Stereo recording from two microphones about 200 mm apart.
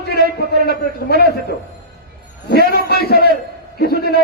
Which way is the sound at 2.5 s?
50° left (ahead or behind).